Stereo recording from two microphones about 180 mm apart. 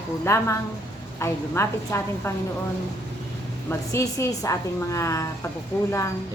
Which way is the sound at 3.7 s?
15° left (ahead or behind).